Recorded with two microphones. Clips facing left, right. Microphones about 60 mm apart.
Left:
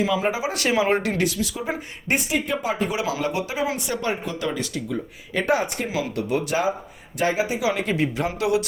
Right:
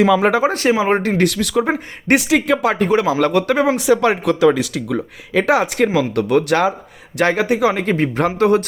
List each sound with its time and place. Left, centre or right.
0.0 s speech: right
0.5 s speech: right
1.2 s speech: right
2.8 s speech: right
3.2 s speech: right
3.8 s speech: right
6.1 s speech: right